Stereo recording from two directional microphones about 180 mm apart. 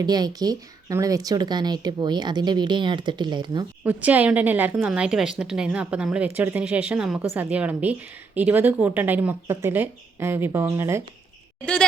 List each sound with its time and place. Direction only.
0.0 s speech: 20° right (ahead or behind)
3.8 s speech: 10° right (ahead or behind)
11.6 s a woman's voice: 5° left (ahead or behind)